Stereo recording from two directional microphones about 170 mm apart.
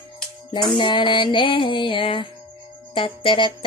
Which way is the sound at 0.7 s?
30° left (ahead or behind).